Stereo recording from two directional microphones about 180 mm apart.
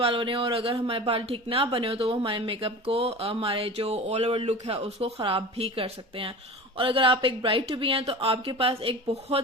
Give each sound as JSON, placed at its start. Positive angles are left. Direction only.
{"t": 0.0, "sound": "speech", "side_deg": -30}